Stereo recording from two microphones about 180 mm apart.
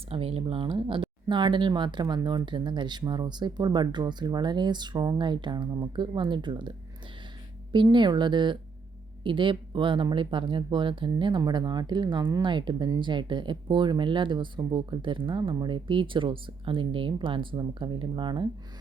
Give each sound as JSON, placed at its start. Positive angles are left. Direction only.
{"t": 0.1, "sound": "speech", "side_deg": -30}